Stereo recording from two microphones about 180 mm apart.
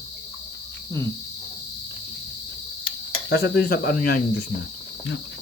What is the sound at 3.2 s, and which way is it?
Cricket, 70° left (ahead or behind).